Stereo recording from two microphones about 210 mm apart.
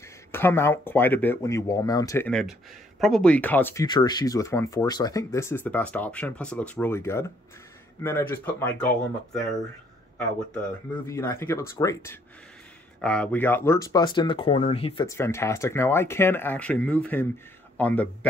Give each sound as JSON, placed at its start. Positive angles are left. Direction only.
{"t": 0.3, "sound": "speech", "side_deg": 10}
{"t": 15.0, "sound": "speech", "side_deg": 10}